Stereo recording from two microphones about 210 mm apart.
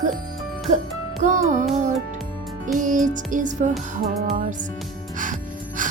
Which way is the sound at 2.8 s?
40° right (ahead or behind).